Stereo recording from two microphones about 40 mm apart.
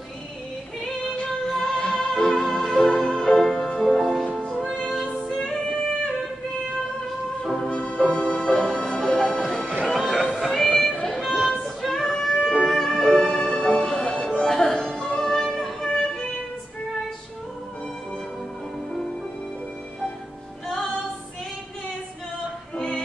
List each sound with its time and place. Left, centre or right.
1.5 s music: centre
2.4 s music: centre
7.4 s music: centre
7.7 s music: left
9.8 s music: centre
10.9 s music: centre
11.1 s a sound: centre
11.8 s music: centre